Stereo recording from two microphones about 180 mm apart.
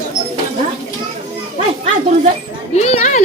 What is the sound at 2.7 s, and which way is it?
Speech, 35° left (ahead or behind).